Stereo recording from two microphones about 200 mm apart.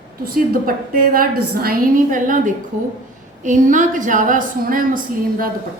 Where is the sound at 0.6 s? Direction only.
45° right (ahead or behind).